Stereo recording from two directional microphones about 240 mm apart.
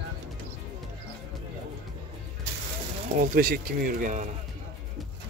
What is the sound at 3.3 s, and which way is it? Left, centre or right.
Speech, right.